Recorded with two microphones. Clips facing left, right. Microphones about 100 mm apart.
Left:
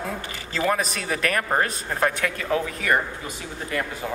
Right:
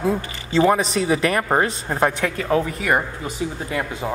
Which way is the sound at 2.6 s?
10° right (ahead or behind).